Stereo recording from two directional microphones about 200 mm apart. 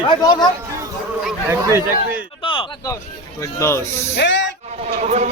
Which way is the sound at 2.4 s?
25° left (ahead or behind).